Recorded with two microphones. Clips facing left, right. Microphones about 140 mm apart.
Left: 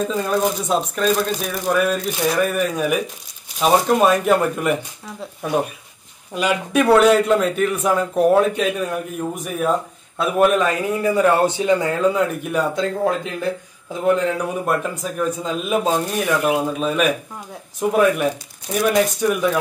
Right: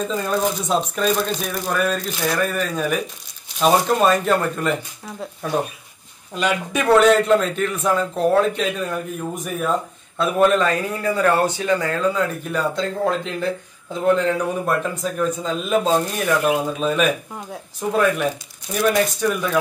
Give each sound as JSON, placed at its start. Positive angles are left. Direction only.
{"t": 0.0, "sound": "a man's voice", "side_deg": 5}